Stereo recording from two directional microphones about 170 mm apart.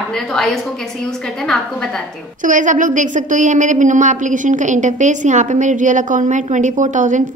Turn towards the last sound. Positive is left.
turn(degrees=-45)  # may be behind; listen again after turning